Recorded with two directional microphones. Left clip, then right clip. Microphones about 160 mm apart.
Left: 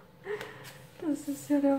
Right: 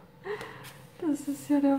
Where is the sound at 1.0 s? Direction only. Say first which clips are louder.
Right 2 dB; 20° right (ahead or behind).